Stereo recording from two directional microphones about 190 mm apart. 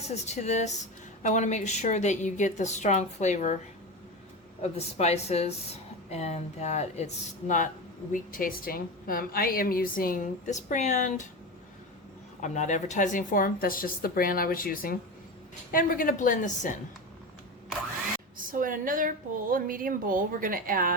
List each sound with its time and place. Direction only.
0.1 s a woman's voice: 35° left (ahead or behind)
4.6 s a woman's voice: 35° left (ahead or behind)
12.4 s a woman's voice: 40° left (ahead or behind)
18.3 s speech: 45° right (ahead or behind)